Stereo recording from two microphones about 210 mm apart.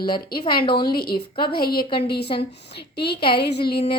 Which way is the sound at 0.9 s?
45° left (ahead or behind).